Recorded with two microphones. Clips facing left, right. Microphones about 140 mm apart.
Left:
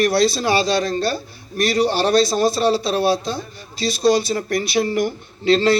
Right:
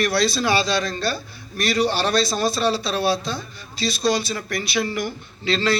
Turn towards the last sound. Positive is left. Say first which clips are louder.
# left 7 dB
turn(degrees=55)  # may be behind; listen again after turning